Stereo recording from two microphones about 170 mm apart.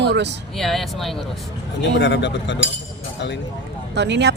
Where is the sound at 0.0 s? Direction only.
90° right.